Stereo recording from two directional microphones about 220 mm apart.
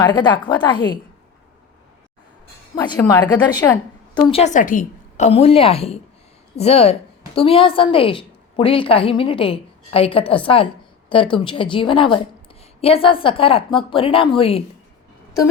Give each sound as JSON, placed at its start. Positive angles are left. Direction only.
{"t": 0.0, "sound": "a woman's voice", "side_deg": 20}
{"t": 2.7, "sound": "a woman's voice", "side_deg": 20}